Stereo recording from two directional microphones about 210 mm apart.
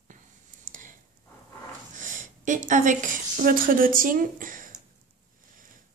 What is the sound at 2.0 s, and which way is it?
A woman's voice, 35° right (ahead or behind).